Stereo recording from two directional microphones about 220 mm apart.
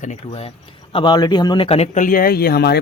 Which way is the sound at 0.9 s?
20° left (ahead or behind).